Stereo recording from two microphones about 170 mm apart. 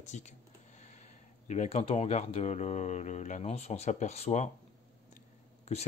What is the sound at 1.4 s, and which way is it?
Speech, 45° left (ahead or behind).